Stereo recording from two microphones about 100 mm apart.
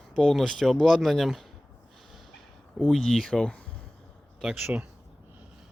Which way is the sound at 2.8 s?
5° left (ahead or behind).